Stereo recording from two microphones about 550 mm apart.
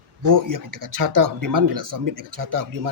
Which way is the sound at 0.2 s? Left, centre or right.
Right.